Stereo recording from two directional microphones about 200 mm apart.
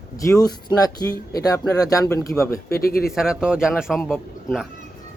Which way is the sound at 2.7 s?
50° left (ahead or behind).